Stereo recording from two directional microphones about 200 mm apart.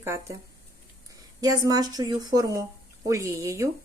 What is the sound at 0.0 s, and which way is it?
Speech, 15° right (ahead or behind).